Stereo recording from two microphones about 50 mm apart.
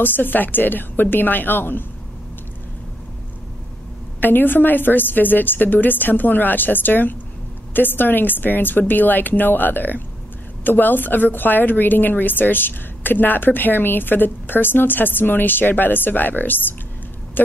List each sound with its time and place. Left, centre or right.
0.0 s a woman's voice: left
4.2 s a woman's voice: left